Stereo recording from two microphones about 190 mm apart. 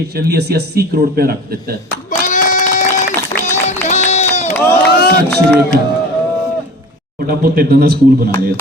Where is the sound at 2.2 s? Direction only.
45° left (ahead or behind).